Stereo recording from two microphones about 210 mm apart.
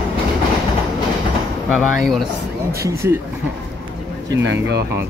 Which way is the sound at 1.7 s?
Centre (ahead or behind).